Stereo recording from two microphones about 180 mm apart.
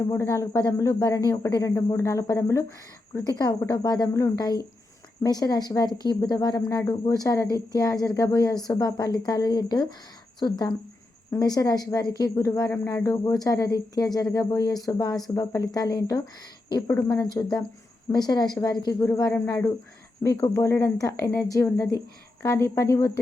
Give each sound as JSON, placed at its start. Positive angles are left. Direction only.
{"t": 0.0, "sound": "speech", "side_deg": 15}
{"t": 11.3, "sound": "speech", "side_deg": 20}